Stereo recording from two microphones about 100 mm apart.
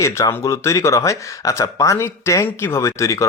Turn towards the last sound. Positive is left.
turn(degrees=30)  # may be behind; listen again after turning